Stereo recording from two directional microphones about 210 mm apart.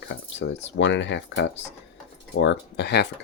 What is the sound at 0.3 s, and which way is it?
Speech, 60° left (ahead or behind).